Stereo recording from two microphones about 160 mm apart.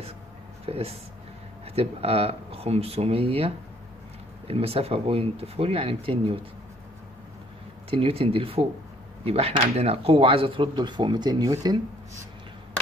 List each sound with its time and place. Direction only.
0.7 s speech: 40° right (ahead or behind)
7.9 s speech: 35° right (ahead or behind)